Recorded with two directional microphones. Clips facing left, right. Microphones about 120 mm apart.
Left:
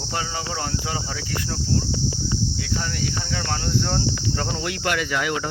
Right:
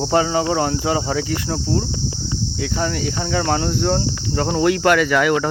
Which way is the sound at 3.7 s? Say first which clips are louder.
Right 5 dB; 30° right (ahead or behind).